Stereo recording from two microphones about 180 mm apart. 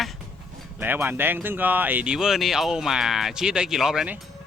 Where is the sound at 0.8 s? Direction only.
10° right (ahead or behind).